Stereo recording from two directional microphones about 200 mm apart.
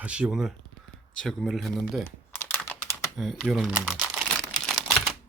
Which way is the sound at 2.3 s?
10° left (ahead or behind).